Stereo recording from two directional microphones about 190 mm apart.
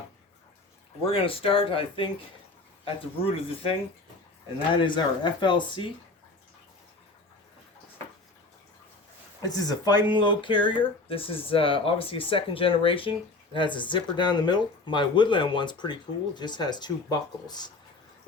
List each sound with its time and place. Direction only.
1.1 s speech: 30° left (ahead or behind)
9.4 s speech: 20° left (ahead or behind)